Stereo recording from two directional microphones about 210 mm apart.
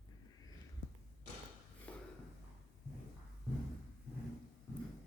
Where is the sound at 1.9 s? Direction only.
5° left (ahead or behind).